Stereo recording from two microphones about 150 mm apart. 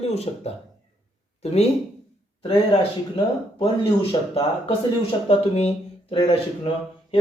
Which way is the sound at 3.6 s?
35° left (ahead or behind).